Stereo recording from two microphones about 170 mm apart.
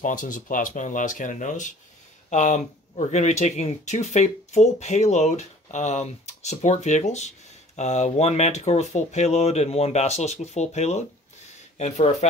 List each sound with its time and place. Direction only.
0.0 s speech: 50° left (ahead or behind)